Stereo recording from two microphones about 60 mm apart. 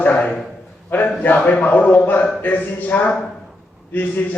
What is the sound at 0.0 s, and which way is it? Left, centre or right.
A man's voice, left.